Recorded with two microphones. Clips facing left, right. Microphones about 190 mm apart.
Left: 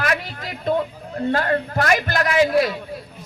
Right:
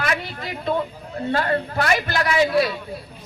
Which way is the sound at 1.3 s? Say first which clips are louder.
Left 1 dB; 40° left (ahead or behind).